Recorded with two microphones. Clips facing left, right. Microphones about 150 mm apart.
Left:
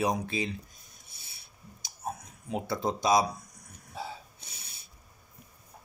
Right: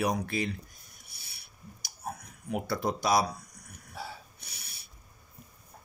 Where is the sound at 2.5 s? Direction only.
20° left (ahead or behind).